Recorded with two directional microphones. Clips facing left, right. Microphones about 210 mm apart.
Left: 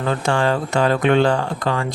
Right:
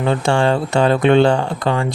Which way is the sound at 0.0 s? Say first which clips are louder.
Right 3 dB; 25° right (ahead or behind).